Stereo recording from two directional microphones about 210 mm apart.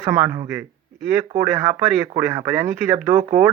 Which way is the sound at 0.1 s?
15° right (ahead or behind).